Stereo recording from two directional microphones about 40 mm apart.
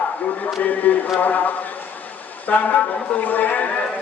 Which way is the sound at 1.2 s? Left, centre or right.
Left.